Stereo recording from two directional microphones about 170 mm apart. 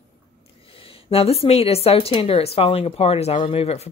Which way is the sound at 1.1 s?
35° left (ahead or behind).